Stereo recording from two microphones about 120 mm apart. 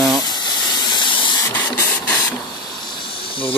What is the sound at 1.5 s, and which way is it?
Printer, 15° left (ahead or behind).